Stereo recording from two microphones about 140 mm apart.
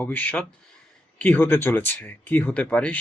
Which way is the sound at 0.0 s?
10° left (ahead or behind).